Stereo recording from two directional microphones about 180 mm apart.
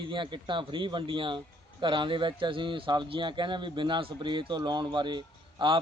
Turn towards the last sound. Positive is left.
turn(degrees=-25)  # may be behind; listen again after turning